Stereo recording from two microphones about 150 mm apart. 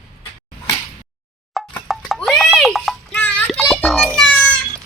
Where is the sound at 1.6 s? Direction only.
Centre (ahead or behind).